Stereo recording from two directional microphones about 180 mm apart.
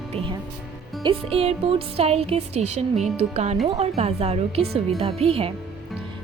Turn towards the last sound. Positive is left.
turn(degrees=-35)  # may be behind; listen again after turning